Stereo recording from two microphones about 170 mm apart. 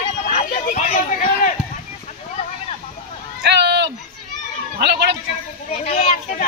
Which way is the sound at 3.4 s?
85° right.